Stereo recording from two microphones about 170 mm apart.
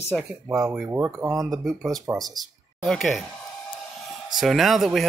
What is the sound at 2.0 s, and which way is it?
Speech, 20° right (ahead or behind).